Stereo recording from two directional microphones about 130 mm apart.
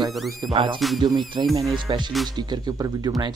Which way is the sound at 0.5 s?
40° right (ahead or behind).